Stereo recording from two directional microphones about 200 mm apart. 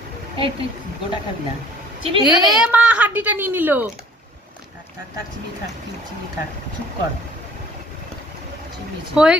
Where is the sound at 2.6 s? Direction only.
5° right (ahead or behind).